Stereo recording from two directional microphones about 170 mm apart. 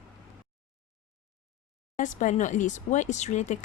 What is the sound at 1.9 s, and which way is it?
Speech, 50° left (ahead or behind).